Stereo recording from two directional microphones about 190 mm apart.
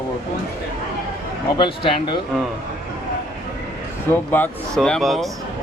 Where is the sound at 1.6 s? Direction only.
25° left (ahead or behind).